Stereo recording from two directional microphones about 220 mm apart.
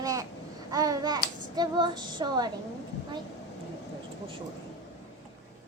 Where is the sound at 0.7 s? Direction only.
15° right (ahead or behind).